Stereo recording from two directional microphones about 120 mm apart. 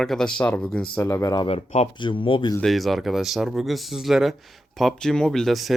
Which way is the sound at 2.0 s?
45° left (ahead or behind).